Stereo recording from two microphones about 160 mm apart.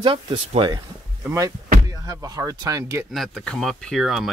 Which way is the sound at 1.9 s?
20° right (ahead or behind).